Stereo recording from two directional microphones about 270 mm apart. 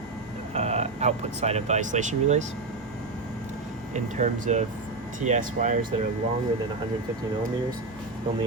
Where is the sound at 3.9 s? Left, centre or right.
Right.